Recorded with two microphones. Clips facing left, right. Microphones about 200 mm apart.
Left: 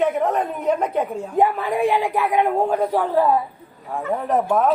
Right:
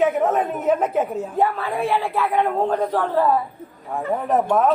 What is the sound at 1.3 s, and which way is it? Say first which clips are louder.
A man's voice: left 5 dB; 15° left (ahead or behind).